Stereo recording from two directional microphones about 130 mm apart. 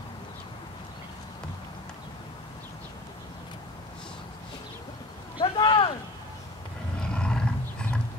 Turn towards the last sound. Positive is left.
turn(degrees=5)  # may be behind; listen again after turning